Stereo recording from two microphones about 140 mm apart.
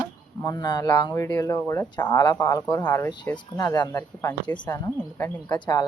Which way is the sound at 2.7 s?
15° left (ahead or behind).